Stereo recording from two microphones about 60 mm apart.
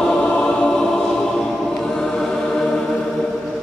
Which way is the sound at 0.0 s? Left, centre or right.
Centre.